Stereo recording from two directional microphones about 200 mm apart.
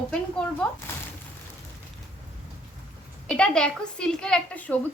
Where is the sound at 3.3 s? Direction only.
5° left (ahead or behind).